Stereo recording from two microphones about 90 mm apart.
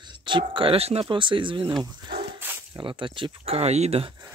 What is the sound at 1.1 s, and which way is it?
Speech, 70° right (ahead or behind).